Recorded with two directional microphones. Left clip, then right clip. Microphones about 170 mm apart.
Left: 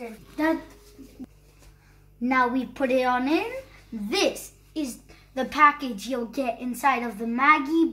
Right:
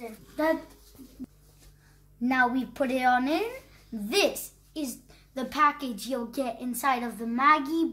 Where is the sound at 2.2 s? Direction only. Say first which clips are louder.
Left 2 dB; 50° right (ahead or behind).